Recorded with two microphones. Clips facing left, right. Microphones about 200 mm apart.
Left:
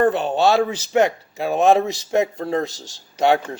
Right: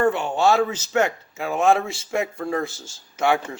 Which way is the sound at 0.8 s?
15° left (ahead or behind).